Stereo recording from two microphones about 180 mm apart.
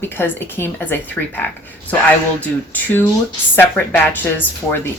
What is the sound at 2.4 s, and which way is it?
Speech, 10° left (ahead or behind).